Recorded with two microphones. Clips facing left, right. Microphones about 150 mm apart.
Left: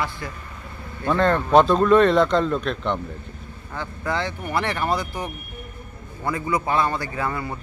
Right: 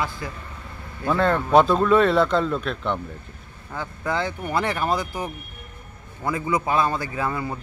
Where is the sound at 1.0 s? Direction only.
5° right (ahead or behind).